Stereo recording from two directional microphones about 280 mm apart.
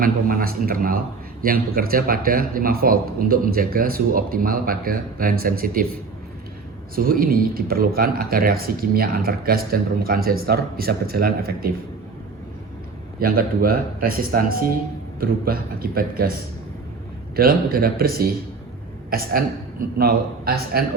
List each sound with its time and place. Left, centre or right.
0.0 s speech: right
13.1 s speech: right
17.3 s speech: right